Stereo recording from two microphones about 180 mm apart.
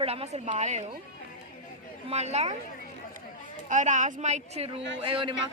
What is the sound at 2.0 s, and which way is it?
Speech, 35° right (ahead or behind).